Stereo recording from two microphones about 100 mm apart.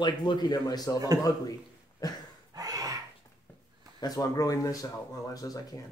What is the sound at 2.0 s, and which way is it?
Speech, 40° left (ahead or behind).